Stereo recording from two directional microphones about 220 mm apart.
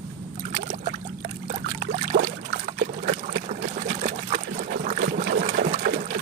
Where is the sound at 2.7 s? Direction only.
40° right (ahead or behind).